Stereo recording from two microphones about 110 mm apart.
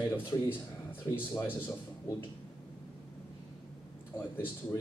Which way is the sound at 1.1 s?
20° left (ahead or behind).